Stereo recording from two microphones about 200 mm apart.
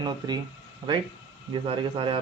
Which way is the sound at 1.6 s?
25° right (ahead or behind).